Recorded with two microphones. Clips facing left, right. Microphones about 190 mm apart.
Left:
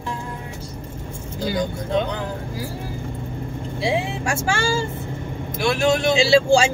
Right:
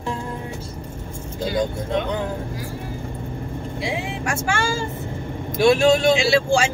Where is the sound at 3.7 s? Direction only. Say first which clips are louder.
Left 5 dB; 25° left (ahead or behind).